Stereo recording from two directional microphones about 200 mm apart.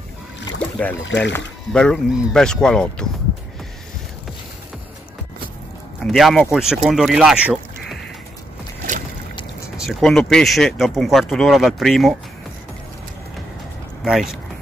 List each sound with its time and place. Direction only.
0.6 s boat: 5° left (ahead or behind)
1.0 s speech: 60° left (ahead or behind)
1.7 s speech: 5° left (ahead or behind)
6.0 s speech: centre (ahead or behind)
9.8 s speech: centre (ahead or behind)
14.0 s speech: centre (ahead or behind)